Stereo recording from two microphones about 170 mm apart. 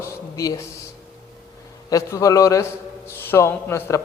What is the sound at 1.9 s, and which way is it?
A man's voice, 20° left (ahead or behind).